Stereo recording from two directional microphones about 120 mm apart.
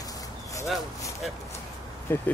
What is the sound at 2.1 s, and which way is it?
Speech, 15° left (ahead or behind).